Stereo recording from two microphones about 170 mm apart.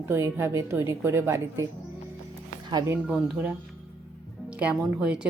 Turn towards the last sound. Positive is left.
turn(degrees=-5)  # may be behind; listen again after turning